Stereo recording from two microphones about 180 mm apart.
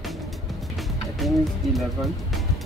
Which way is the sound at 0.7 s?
Centre (ahead or behind).